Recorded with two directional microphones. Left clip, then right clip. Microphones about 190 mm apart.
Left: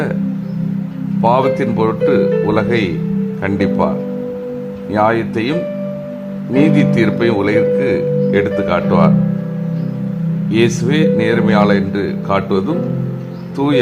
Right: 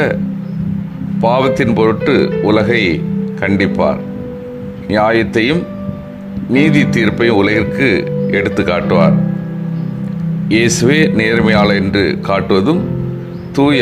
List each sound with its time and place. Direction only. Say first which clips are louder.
1.2 s speech: right 1 dB; 15° right (ahead or behind)
10.5 s speech: right 4 dB; 20° right (ahead or behind)